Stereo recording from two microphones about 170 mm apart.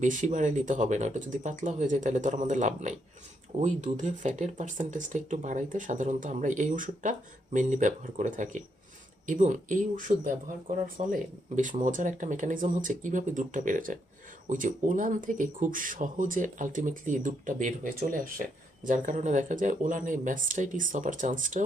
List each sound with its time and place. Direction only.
0.0 s speech: 50° right (ahead or behind)